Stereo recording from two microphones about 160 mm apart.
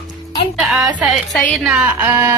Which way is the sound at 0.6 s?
5° right (ahead or behind).